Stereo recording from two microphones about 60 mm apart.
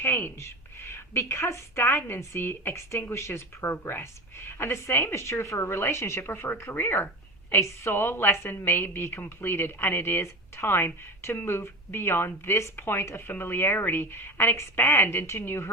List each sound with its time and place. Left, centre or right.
0.0 s a woman's voice: left